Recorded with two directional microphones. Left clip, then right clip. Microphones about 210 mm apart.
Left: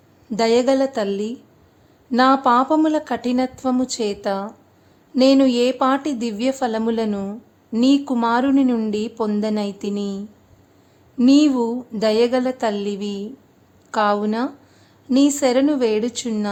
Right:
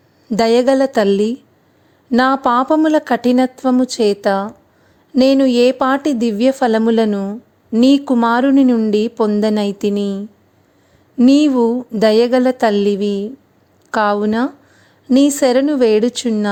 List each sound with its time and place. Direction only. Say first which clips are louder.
0.3 s a woman's voice: right 4 dB; 35° right (ahead or behind)